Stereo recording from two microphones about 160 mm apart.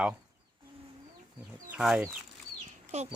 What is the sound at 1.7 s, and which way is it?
Speech, 5° right (ahead or behind).